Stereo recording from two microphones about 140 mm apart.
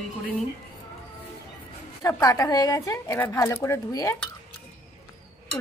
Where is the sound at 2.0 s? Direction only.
25° left (ahead or behind).